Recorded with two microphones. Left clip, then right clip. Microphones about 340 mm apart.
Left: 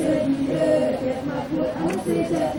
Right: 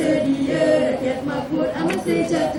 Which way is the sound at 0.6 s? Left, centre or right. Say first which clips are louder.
Right 2 dB; centre.